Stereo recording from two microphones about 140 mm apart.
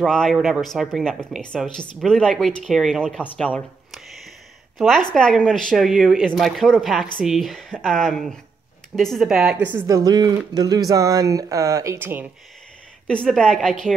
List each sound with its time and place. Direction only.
0.0 s speech: 5° left (ahead or behind)
9.8 s speech: 25° right (ahead or behind)
13.0 s speech: 5° left (ahead or behind)